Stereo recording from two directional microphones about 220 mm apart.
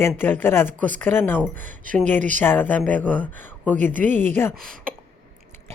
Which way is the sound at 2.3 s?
10° left (ahead or behind).